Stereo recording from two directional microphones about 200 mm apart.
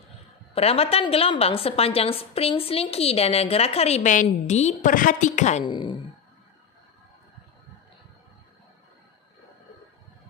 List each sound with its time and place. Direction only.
0.6 s a woman's voice: 30° left (ahead or behind)
5.7 s a woman's voice: 25° left (ahead or behind)